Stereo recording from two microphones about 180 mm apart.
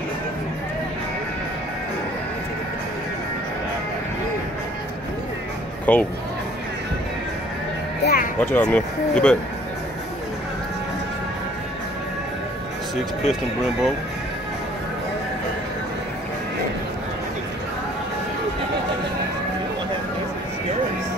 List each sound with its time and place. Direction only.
5.9 s speech: 10° left (ahead or behind)
8.0 s music: 60° left (ahead or behind)
8.4 s speech: 10° left (ahead or behind)